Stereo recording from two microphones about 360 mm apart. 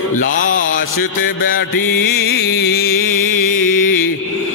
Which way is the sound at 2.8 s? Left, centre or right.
Left.